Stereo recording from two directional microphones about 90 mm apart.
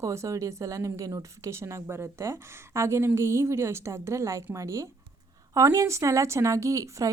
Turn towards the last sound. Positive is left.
turn(degrees=-35)  # may be behind; listen again after turning